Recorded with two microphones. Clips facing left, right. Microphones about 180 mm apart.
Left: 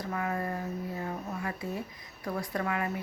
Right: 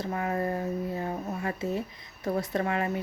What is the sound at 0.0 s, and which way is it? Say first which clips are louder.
Speech: right 3 dB; 25° right (ahead or behind).